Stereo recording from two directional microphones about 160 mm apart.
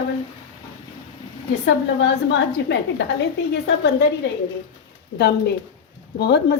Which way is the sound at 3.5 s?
90° left.